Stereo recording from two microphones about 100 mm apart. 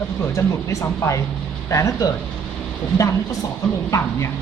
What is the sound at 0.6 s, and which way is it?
Speech, 30° left (ahead or behind).